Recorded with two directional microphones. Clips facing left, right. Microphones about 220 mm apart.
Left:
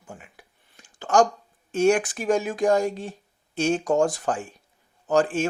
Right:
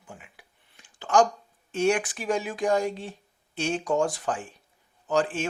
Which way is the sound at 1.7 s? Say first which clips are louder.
Left 4 dB; 45° left (ahead or behind).